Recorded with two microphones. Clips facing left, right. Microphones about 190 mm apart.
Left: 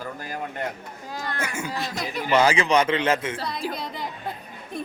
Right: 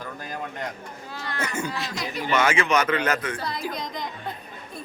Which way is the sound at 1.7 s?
50° left (ahead or behind).